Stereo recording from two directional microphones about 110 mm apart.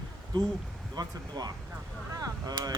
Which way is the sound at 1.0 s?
40° right (ahead or behind).